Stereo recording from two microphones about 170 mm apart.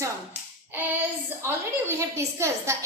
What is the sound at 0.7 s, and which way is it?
Child singing, 10° right (ahead or behind).